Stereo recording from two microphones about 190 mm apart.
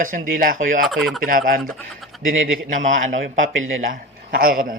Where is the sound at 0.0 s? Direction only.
45° right (ahead or behind).